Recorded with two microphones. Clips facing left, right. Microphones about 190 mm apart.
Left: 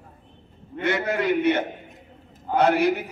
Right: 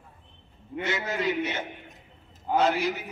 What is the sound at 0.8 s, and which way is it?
A man's voice, 60° left (ahead or behind).